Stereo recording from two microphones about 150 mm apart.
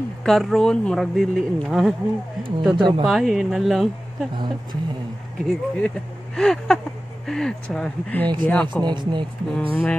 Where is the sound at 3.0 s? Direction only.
Centre (ahead or behind).